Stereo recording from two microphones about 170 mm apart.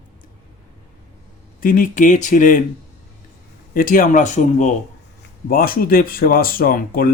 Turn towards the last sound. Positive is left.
turn(degrees=55)  # may be behind; listen again after turning